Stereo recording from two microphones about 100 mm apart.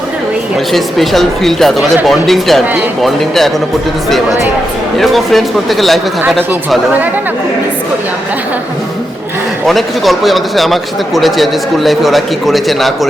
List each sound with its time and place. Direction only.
0.7 s speech: centre (ahead or behind)
4.9 s speech: centre (ahead or behind)
9.6 s speech: centre (ahead or behind)